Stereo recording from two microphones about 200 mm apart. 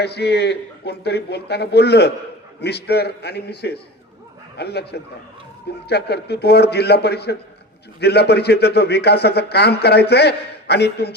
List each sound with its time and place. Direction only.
0.0 s a man's voice: 55° left (ahead or behind)